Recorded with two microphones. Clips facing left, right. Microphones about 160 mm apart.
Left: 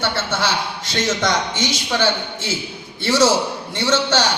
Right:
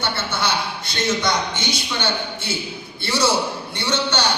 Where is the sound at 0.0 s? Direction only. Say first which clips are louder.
Left 3 dB; 90° left.